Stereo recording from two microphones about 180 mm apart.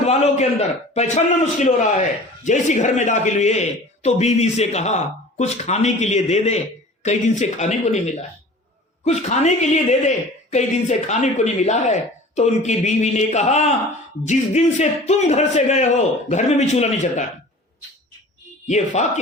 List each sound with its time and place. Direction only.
0.0 s a man's voice: 35° left (ahead or behind)
18.7 s a man's voice: 40° left (ahead or behind)